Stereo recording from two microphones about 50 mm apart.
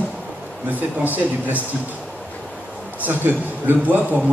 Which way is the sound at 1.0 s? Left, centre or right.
Right.